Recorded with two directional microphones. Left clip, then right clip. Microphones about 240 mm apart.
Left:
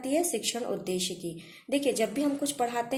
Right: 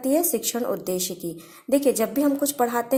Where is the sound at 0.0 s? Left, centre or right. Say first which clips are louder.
Right 6 dB; right.